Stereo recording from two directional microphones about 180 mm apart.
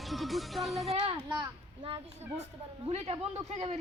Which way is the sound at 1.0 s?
30° right (ahead or behind).